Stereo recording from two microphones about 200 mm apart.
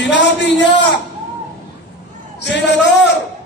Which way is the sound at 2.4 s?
60° left (ahead or behind).